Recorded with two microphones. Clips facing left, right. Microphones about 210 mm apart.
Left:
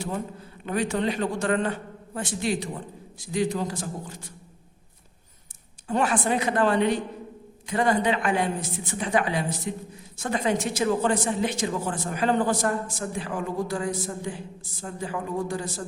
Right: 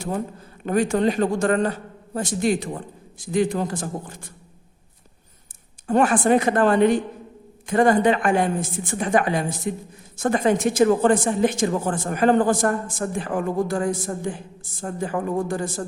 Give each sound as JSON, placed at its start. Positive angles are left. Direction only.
{"t": 0.6, "sound": "a woman's voice", "side_deg": -45}
{"t": 5.9, "sound": "a woman's voice", "side_deg": -50}